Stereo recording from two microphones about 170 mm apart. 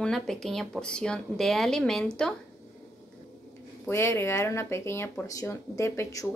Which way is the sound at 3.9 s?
15° left (ahead or behind).